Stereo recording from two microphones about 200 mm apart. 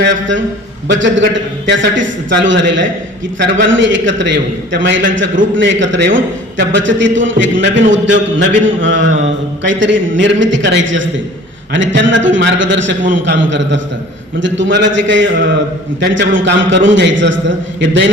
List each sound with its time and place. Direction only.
0.0 s a man's voice: 70° right (ahead or behind)